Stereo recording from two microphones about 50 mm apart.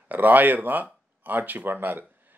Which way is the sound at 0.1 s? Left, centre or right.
Right.